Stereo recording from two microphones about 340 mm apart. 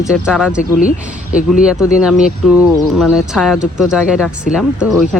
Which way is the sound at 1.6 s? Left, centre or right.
Centre.